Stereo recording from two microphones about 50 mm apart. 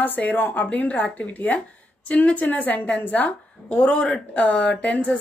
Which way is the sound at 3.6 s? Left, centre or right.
Left.